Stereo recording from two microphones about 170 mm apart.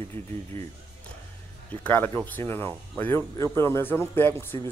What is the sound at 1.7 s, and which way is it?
Speech, 10° left (ahead or behind).